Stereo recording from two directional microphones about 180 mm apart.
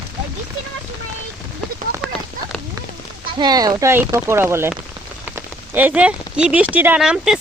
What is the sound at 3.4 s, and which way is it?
Speech, 20° right (ahead or behind).